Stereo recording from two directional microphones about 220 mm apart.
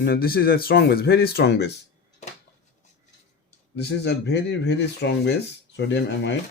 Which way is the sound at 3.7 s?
50° left (ahead or behind).